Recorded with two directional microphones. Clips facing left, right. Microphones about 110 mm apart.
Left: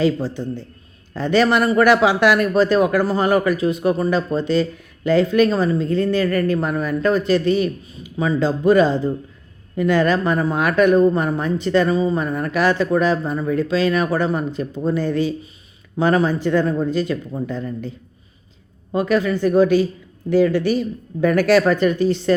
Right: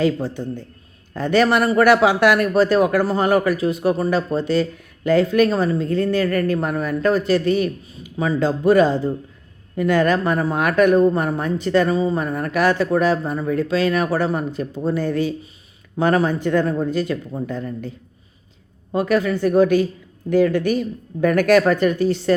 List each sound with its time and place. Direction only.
0.0 s speech: 50° right (ahead or behind)
11.2 s speech: 50° right (ahead or behind)
11.9 s speech: 35° right (ahead or behind)
12.2 s speech: 50° right (ahead or behind)